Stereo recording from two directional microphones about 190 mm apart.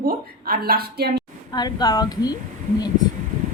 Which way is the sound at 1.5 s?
20° left (ahead or behind).